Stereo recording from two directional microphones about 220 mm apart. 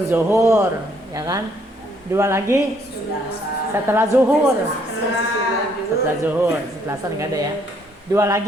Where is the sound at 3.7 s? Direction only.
10° right (ahead or behind).